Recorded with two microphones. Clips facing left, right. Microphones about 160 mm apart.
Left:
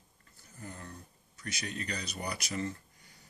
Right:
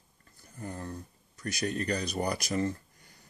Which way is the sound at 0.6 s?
40° right (ahead or behind).